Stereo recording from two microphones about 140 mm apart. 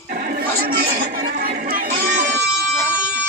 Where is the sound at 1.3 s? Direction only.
90° right.